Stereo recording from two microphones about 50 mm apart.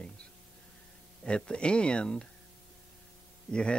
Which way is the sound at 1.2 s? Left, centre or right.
Centre.